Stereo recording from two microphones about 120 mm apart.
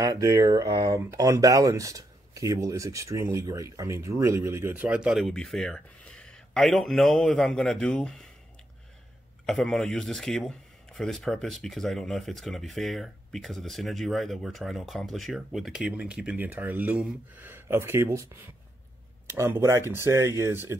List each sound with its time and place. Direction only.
0.0 s speech: 30° right (ahead or behind); by 8.3 s 5° left (ahead or behind)
9.5 s speech: 5° left (ahead or behind); by 20.7 s 20° right (ahead or behind)